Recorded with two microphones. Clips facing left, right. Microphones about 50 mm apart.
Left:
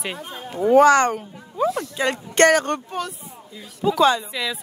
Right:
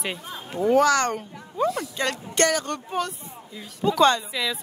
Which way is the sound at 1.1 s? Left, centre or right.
Centre.